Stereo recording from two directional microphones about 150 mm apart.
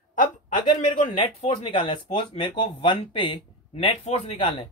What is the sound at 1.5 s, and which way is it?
Speech, 30° left (ahead or behind).